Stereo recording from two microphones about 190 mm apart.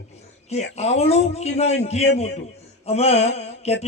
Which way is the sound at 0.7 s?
35° left (ahead or behind).